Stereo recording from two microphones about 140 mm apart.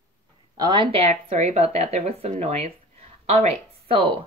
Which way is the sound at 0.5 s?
30° right (ahead or behind).